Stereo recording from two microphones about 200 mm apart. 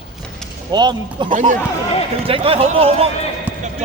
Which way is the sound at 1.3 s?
40° right (ahead or behind).